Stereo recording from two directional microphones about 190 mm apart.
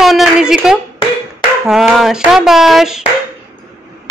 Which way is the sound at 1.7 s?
Centre (ahead or behind).